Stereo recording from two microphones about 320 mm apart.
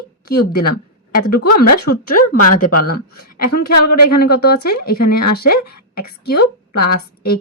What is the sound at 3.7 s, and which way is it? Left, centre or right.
Speech, left.